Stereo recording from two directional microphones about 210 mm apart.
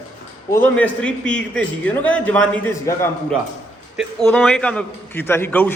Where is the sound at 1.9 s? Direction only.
5° left (ahead or behind).